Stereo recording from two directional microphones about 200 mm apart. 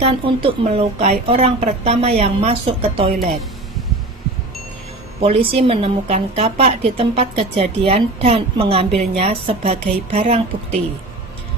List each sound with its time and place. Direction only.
0.0 s a woman's voice: 25° right (ahead or behind)
5.2 s a woman's voice: 30° right (ahead or behind)